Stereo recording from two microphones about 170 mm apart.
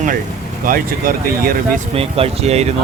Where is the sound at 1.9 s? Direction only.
35° right (ahead or behind).